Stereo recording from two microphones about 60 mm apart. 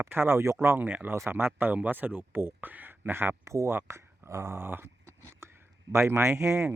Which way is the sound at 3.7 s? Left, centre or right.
Right.